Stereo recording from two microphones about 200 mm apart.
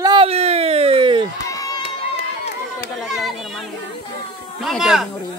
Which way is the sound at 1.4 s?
15° left (ahead or behind).